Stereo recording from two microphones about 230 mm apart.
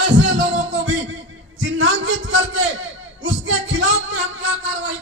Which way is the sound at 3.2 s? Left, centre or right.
Right.